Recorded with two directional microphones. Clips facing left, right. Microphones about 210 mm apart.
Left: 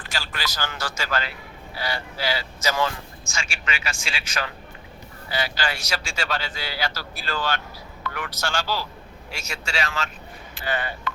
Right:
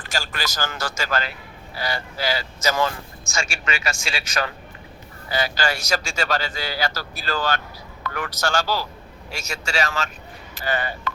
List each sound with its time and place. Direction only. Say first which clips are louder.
0.0 s a man's voice: right 3 dB; 45° right (ahead or behind)